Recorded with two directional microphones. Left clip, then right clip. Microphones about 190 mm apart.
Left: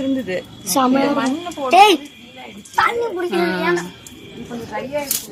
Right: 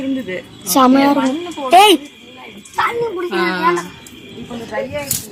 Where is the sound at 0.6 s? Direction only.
45° right (ahead or behind).